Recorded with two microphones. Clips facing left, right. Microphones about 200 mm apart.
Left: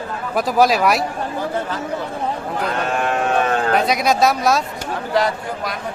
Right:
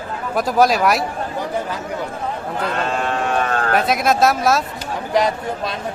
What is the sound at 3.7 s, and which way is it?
Speech, centre (ahead or behind).